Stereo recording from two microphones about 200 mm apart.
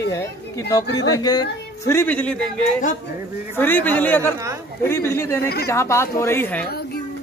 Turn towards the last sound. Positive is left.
turn(degrees=10)  # may be behind; listen again after turning